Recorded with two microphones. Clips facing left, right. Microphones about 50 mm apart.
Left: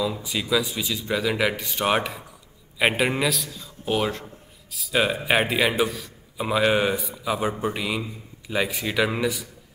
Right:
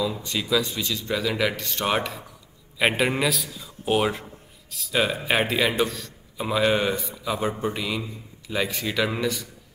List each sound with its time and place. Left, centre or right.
0.0 s a man's voice: centre
4.6 s a man's voice: centre